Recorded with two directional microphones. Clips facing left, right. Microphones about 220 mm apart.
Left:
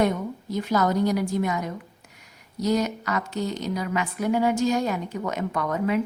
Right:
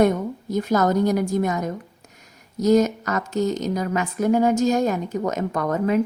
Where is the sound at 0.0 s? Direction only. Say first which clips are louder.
Right 5 dB; 45° right (ahead or behind).